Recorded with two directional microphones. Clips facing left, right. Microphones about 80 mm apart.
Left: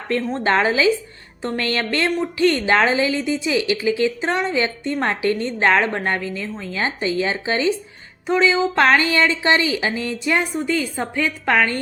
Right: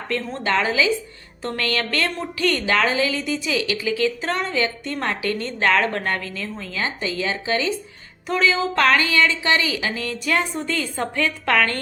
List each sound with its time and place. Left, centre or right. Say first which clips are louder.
0.2 s a woman's voice: left 4 dB; left; by 11.8 s centre